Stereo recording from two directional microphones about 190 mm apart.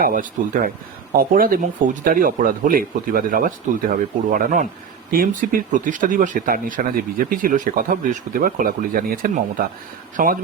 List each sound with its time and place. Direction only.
0.0 s speech: 45° right (ahead or behind)